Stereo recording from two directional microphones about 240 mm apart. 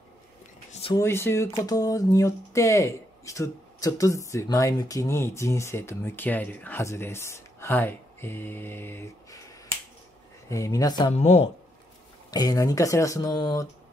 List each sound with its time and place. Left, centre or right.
0.9 s speech: centre
10.5 s speech: centre
12.3 s speech: centre